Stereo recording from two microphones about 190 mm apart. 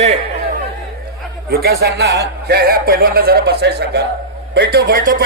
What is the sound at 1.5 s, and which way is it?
A man's voice, 55° right (ahead or behind).